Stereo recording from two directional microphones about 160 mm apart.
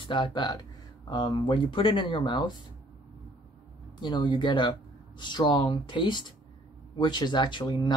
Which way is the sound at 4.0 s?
25° left (ahead or behind).